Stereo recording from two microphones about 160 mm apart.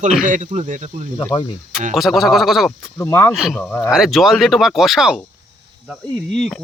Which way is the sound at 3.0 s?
15° left (ahead or behind).